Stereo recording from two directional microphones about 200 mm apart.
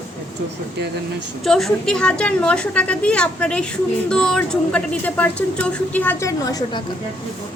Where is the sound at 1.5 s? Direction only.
Centre (ahead or behind); by 6.8 s 20° left (ahead or behind).